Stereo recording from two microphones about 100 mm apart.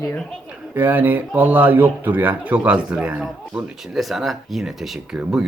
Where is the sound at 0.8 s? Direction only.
20° right (ahead or behind).